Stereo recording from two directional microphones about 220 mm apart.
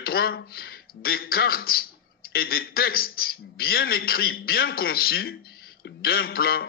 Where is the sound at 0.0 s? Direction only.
45° left (ahead or behind).